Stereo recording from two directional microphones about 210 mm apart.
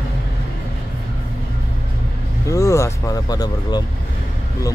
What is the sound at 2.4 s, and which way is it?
Vehicle, 15° left (ahead or behind).